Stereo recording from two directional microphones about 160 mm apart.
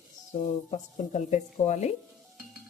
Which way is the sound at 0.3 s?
50° left (ahead or behind).